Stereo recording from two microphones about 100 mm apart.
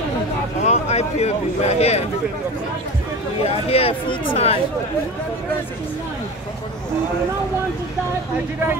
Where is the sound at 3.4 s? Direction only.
80° left.